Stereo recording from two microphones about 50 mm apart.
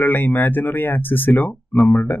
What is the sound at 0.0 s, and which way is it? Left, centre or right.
Speech, left.